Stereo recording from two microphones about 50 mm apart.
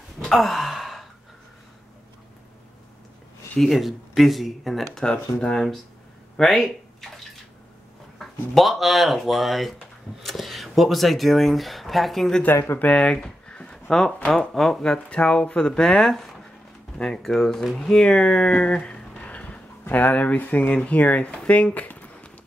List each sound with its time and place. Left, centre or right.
0.4 s sigh: centre
3.5 s speech: centre
5.5 s speech: centre
8.2 s speech: centre
12.7 s speech: left; by 15.0 s centre
15.0 s speech: left